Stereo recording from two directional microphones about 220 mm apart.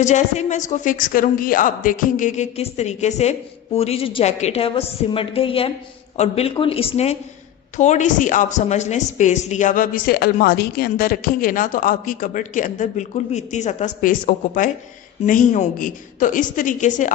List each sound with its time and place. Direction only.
0.0 s a woman's voice: 35° left (ahead or behind)